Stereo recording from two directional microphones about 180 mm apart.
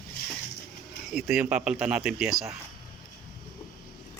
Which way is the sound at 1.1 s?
Centre (ahead or behind).